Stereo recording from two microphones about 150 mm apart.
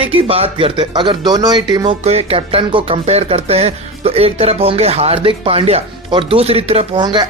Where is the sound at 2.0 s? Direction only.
45° right (ahead or behind).